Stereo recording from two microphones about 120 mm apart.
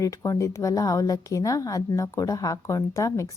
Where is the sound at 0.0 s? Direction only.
25° left (ahead or behind).